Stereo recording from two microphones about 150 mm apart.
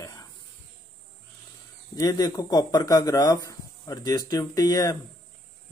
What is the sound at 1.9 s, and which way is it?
Speech, 25° left (ahead or behind).